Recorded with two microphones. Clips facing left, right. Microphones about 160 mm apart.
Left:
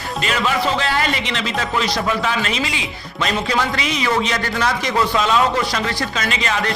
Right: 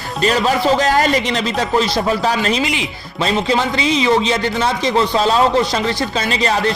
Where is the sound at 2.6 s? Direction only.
20° right (ahead or behind).